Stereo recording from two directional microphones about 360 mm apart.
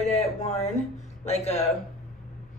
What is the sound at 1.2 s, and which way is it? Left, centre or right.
Speech, centre.